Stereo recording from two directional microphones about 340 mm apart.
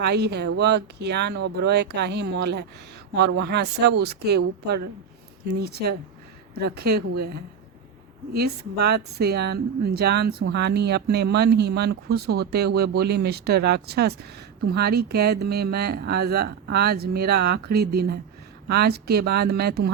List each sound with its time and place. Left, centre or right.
0.0 s speech: right